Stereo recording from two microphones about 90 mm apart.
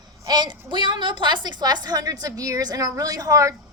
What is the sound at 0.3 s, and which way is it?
A woman's voice, 55° right (ahead or behind).